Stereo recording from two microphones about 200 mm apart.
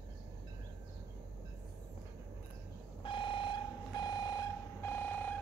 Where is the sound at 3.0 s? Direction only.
25° left (ahead or behind).